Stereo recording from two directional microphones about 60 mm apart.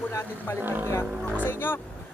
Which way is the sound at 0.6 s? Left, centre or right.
Right.